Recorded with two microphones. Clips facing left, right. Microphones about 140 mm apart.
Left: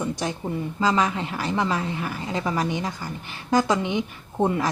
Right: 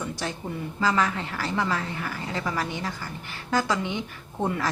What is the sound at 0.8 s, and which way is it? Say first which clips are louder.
Speech: left 2 dB; 20° left (ahead or behind).